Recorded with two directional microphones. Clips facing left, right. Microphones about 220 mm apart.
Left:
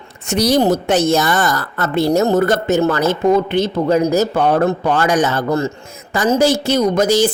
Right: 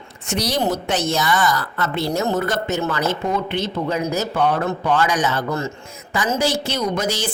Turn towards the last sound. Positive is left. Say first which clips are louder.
# left 9 dB
turn(degrees=45)  # may be behind; listen again after turning